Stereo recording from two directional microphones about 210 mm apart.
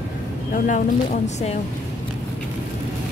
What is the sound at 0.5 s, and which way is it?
Speech, 40° left (ahead or behind).